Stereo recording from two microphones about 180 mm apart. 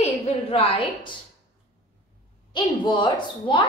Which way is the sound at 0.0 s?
35° left (ahead or behind).